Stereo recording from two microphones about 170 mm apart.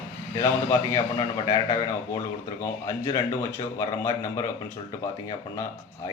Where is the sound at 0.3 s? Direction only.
20° left (ahead or behind).